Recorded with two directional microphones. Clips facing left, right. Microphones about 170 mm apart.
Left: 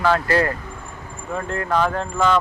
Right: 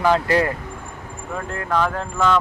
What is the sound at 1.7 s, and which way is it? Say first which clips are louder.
Speech: left 1 dB; 10° left (ahead or behind).